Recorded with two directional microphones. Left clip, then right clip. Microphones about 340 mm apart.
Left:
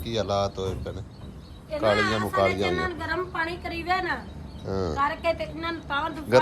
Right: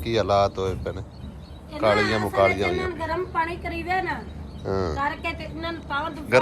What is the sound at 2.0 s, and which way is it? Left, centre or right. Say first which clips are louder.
Speech: right 3 dB; centre.